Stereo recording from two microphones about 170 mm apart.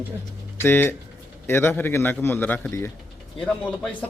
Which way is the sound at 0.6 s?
15° left (ahead or behind).